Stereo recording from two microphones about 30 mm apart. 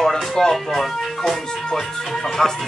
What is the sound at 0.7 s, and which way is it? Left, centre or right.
Speech, centre.